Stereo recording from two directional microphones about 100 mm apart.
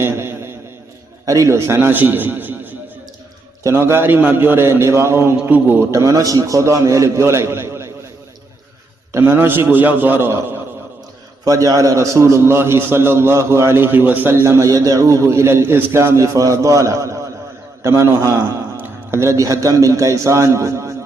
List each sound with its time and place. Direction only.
0.0 s a sound: 25° right (ahead or behind)
1.2 s a man's voice: 35° right (ahead or behind); by 5.8 s 20° right (ahead or behind)
5.9 s a man's voice: 30° right (ahead or behind)
9.1 s a man's voice: 25° right (ahead or behind)
11.4 s a man's voice: 35° right (ahead or behind)